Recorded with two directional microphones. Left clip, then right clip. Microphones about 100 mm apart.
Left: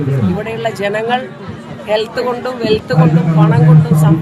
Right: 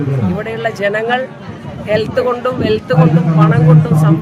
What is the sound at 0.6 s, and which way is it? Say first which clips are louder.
A man's voice: right 2 dB; 35° right (ahead or behind).